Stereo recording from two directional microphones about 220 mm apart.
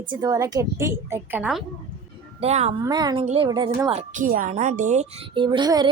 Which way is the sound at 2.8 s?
20° right (ahead or behind).